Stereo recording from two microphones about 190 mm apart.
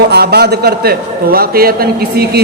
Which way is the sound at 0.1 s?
60° right (ahead or behind).